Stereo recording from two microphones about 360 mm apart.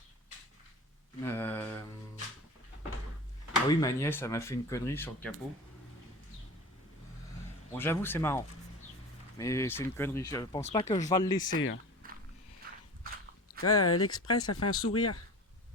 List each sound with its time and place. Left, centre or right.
1.2 s a sound: centre
3.7 s speech: centre
7.7 s speech: centre
11.4 s speech: left
12.0 s biting: right
13.6 s speech: left